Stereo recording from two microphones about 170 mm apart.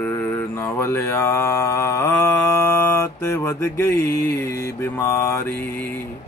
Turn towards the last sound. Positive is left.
turn(degrees=10)  # may be behind; listen again after turning